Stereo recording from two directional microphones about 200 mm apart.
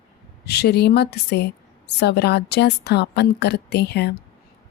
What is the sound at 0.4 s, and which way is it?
A woman's voice, 55° left (ahead or behind).